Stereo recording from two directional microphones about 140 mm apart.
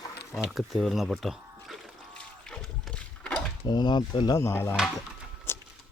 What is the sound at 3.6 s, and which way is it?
Speech, 30° left (ahead or behind).